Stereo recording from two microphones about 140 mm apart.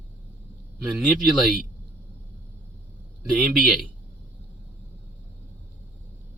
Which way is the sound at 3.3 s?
Centre (ahead or behind).